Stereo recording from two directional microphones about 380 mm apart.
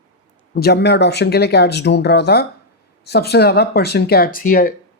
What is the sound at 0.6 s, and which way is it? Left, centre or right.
Speech, left.